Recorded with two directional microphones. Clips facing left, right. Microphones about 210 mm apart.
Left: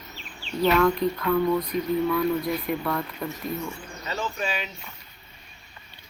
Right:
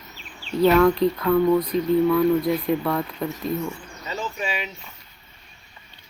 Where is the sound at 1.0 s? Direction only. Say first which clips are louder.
Right 4 dB; 30° right (ahead or behind).